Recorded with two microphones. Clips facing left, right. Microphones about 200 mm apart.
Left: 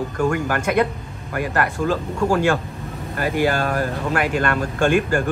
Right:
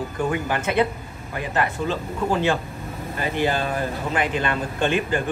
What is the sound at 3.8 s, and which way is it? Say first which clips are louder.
Speech: left 3 dB; 50° left (ahead or behind).